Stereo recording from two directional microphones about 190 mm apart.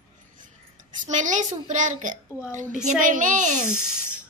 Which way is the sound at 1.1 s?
40° right (ahead or behind).